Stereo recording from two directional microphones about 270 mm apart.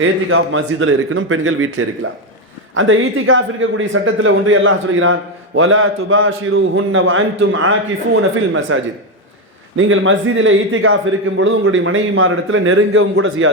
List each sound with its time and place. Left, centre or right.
0.0 s a man's voice: right